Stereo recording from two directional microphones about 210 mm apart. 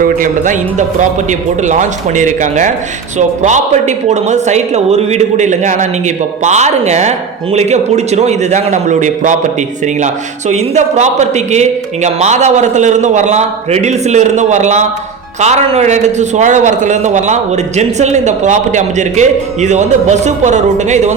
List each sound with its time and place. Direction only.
0.0 s a man's voice: 40° right (ahead or behind)